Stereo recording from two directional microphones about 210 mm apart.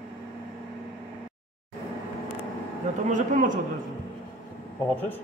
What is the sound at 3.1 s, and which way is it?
Speech, 35° right (ahead or behind).